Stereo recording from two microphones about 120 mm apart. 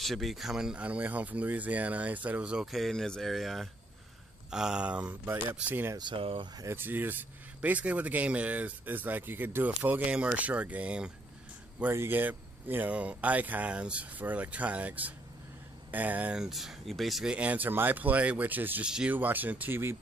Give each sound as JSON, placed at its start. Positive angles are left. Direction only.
{"t": 0.0, "sound": "speech", "side_deg": 0}
{"t": 5.9, "sound": "speech", "side_deg": -45}
{"t": 6.6, "sound": "speech", "side_deg": -20}